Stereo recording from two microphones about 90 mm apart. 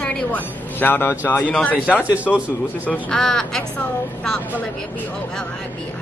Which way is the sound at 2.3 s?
5° left (ahead or behind).